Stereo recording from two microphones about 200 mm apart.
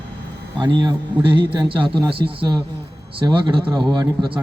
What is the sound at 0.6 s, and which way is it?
A man's voice, 20° right (ahead or behind).